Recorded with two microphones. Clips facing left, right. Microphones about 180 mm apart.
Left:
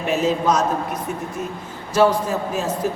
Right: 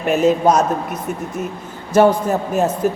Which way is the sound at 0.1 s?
60° right (ahead or behind).